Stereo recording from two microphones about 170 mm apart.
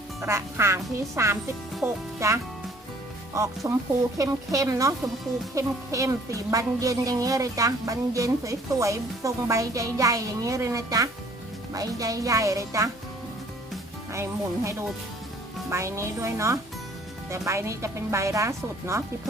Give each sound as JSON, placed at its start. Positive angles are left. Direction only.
{"t": 0.2, "sound": "speech", "side_deg": -15}
{"t": 14.1, "sound": "speech", "side_deg": -15}